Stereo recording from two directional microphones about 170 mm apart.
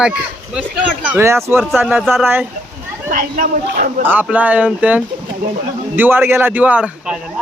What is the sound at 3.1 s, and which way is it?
Speech, 55° right (ahead or behind).